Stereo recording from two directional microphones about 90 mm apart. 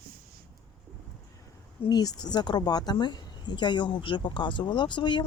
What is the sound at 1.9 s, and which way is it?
Speech, 50° left (ahead or behind).